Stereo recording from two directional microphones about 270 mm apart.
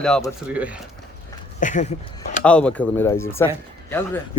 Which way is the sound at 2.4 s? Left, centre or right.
Centre.